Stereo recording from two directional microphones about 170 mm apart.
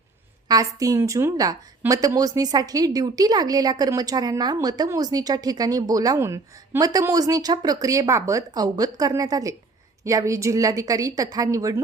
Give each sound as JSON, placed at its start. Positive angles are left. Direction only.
{"t": 0.4, "sound": "a woman's voice", "side_deg": -20}